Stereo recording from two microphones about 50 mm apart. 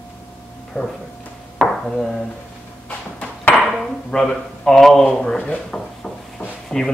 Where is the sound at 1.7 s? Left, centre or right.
Centre.